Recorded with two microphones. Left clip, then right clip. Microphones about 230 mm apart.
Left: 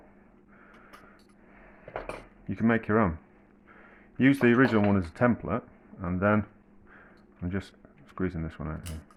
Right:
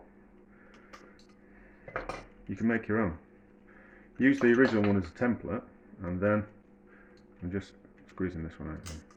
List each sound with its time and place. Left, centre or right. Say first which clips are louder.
2.5 s speech: left 5 dB; left
4.2 s speech: left 2 dB; left
7.4 s speech: left 2 dB; left